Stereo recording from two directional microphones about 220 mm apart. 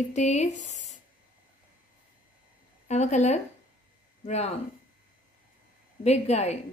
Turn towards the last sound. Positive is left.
turn(degrees=30)  # may be behind; listen again after turning